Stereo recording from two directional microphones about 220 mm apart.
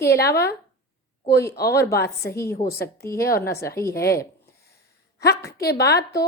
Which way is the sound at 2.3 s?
15° left (ahead or behind).